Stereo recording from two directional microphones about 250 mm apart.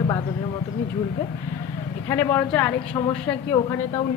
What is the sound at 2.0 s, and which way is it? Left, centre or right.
A woman's voice, centre.